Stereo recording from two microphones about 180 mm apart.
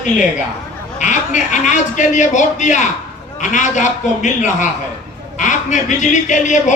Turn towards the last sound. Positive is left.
turn(degrees=45)  # may be behind; listen again after turning